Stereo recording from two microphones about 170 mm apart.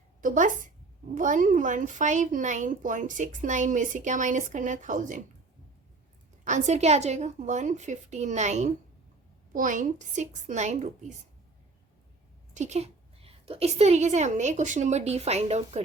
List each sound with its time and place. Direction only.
0.2 s a woman's voice: 50° right (ahead or behind)
6.4 s speech: 45° right (ahead or behind)
12.5 s a woman's voice: 40° right (ahead or behind)